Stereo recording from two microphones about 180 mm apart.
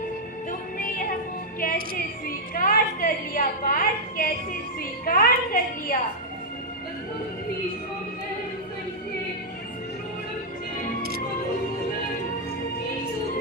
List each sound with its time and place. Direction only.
0.8 s music: 50° left (ahead or behind)
2.2 s a woman's voice: 50° left (ahead or behind)